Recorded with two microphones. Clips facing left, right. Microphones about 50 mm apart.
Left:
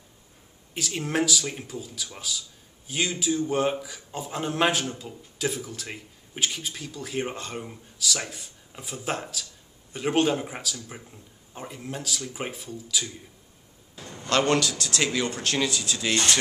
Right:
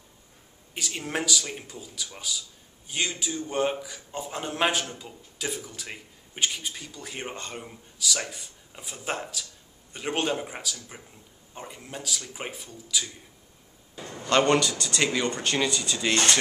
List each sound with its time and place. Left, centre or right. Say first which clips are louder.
0.7 s a man's voice: left 4 dB; centre
14.2 s a man's voice: right 1 dB; centre